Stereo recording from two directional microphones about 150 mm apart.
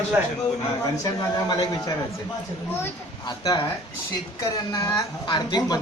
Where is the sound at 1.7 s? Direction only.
20° left (ahead or behind).